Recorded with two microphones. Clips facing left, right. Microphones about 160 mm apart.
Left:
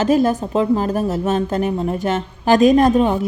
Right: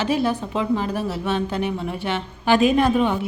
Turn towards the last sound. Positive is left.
turn(degrees=40)  # may be behind; listen again after turning